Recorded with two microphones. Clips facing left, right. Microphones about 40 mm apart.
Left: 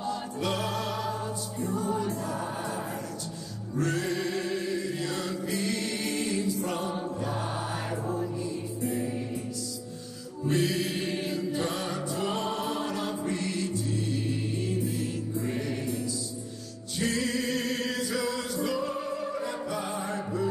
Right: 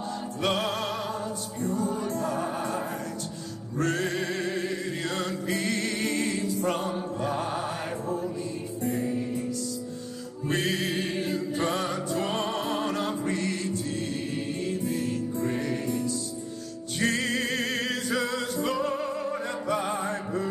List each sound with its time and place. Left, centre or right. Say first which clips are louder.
0.1 s music: right 5 dB; right
1.6 s music: right 2 dB; left
2.1 s music: right 4 dB; right
3.8 s music: right 2 dB; right
10.5 s music: even; right